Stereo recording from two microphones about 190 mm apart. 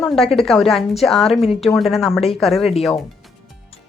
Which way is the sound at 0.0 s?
Centre (ahead or behind).